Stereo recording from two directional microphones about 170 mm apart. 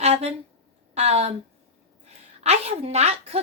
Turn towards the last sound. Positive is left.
turn(degrees=-40)  # may be behind; listen again after turning